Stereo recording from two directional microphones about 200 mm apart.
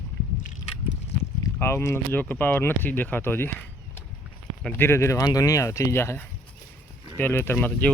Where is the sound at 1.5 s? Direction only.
15° left (ahead or behind).